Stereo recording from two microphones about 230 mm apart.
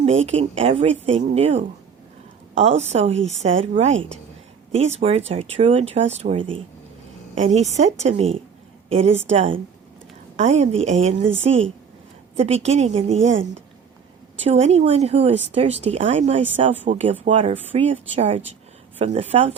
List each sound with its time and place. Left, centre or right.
0.3 s speech: right
2.6 s speech: right
12.6 s speech: right
14.4 s speech: right